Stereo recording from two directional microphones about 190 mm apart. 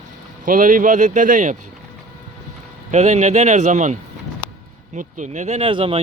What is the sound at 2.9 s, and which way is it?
Speech, 35° right (ahead or behind).